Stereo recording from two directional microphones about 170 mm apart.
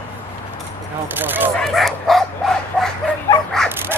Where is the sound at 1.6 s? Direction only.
Centre (ahead or behind).